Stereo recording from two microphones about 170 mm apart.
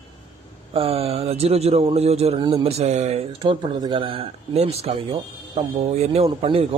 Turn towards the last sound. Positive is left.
turn(degrees=-35)  # may be behind; listen again after turning